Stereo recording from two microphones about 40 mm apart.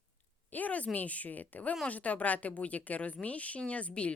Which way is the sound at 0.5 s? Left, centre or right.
Left.